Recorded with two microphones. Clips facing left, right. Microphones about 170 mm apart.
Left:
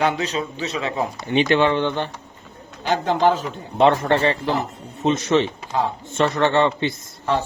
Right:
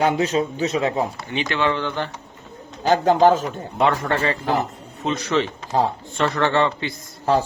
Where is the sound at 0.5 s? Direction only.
40° right (ahead or behind).